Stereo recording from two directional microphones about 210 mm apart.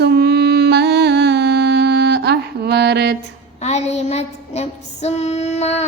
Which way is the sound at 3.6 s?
30° left (ahead or behind).